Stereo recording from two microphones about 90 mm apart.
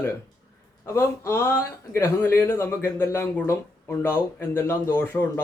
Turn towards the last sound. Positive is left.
turn(degrees=20)  # may be behind; listen again after turning